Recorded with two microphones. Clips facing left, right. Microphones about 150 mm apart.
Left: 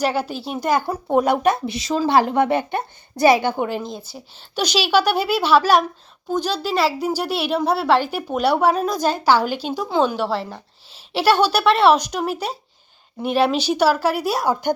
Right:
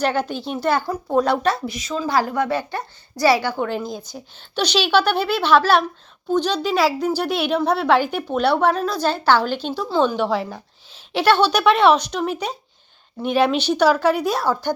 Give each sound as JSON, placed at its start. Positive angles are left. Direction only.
{"t": 0.0, "sound": "a woman's voice", "side_deg": 5}
{"t": 1.6, "sound": "a woman's voice", "side_deg": 30}
{"t": 3.7, "sound": "a woman's voice", "side_deg": 0}